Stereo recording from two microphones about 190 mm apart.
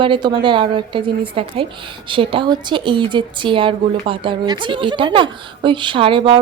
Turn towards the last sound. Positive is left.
turn(degrees=-25)  # may be behind; listen again after turning